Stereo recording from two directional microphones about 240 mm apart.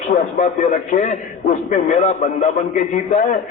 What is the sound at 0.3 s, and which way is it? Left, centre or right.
A man's voice, left.